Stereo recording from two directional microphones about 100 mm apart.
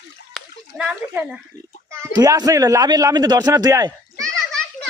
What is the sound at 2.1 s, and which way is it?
Speech, 35° right (ahead or behind).